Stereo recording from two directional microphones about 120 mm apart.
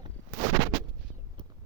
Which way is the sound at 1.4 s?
40° right (ahead or behind).